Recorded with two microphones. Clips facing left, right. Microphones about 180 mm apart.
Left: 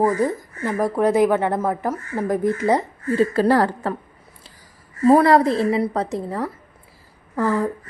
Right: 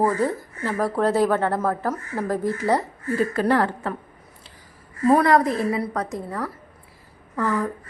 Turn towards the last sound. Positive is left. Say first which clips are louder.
# left 3 dB
turn(degrees=30)  # may be behind; listen again after turning